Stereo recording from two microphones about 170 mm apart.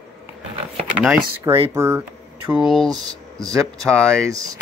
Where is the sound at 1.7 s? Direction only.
15° right (ahead or behind).